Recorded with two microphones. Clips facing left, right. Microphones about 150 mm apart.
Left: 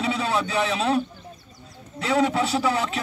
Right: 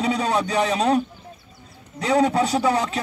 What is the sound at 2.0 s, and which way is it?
Speech, 40° right (ahead or behind).